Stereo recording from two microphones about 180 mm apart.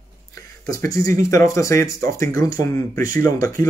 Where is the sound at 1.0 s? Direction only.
15° left (ahead or behind).